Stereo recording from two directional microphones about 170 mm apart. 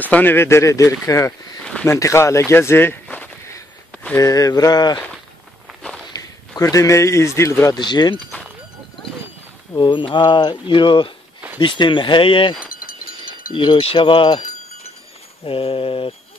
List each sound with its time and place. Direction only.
0.0 s speech: 10° left (ahead or behind)
2.5 s a sound: 15° left (ahead or behind)
4.2 s speech: 20° left (ahead or behind)
5.7 s walk: centre (ahead or behind)
6.1 s a man's voice: 20° left (ahead or behind)
9.8 s speech: 30° left (ahead or behind)
12.7 s a sound: 55° left (ahead or behind)
13.6 s speech: 30° left (ahead or behind)
15.4 s mantra: 35° left (ahead or behind)